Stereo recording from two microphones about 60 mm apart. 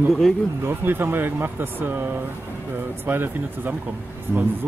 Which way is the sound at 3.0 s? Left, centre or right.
Right.